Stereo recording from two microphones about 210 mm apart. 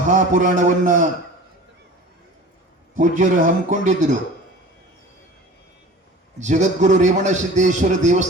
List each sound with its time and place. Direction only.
0.1 s a man's voice: 35° right (ahead or behind)
2.9 s a man's voice: 35° right (ahead or behind)
6.4 s a man's voice: 35° right (ahead or behind)